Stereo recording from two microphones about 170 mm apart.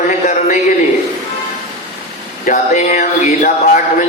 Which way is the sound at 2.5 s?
45° left (ahead or behind).